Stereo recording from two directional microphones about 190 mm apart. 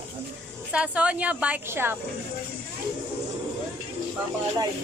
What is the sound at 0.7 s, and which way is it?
A woman's voice, 5° right (ahead or behind).